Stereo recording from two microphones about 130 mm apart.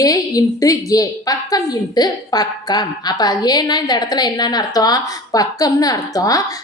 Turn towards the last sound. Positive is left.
turn(degrees=25)  # may be behind; listen again after turning